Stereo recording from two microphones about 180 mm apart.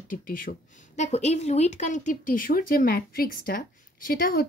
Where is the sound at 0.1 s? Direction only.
50° left (ahead or behind).